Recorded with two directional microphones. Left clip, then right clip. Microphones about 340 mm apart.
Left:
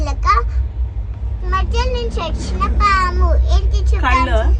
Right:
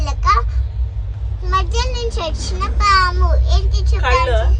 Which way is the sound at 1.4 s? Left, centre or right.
Right.